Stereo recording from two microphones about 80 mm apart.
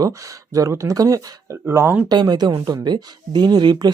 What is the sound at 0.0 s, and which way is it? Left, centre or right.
Speech, right.